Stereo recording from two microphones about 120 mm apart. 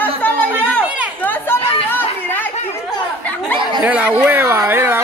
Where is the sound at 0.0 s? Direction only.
15° left (ahead or behind).